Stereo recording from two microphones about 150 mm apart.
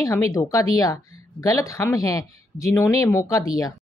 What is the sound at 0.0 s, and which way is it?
A woman's voice, 20° left (ahead or behind).